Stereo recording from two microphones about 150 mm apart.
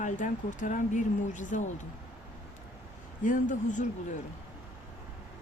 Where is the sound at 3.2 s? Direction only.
60° left (ahead or behind).